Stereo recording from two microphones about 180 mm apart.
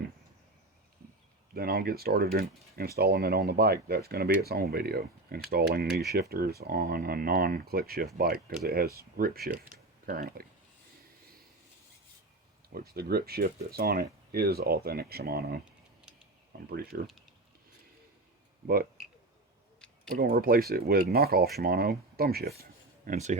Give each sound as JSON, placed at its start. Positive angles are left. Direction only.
{"t": 1.5, "sound": "speech", "side_deg": -55}
{"t": 9.7, "sound": "a sound", "side_deg": -55}
{"t": 12.7, "sound": "speech", "side_deg": -60}
{"t": 19.0, "sound": "a sound", "side_deg": 0}
{"t": 20.1, "sound": "speech", "side_deg": -50}
{"t": 23.0, "sound": "speech", "side_deg": -40}